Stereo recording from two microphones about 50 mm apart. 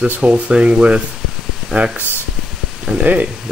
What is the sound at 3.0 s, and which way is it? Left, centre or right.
Speech, right.